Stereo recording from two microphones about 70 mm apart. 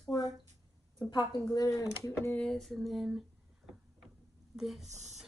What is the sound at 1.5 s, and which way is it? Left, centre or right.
Speech, left.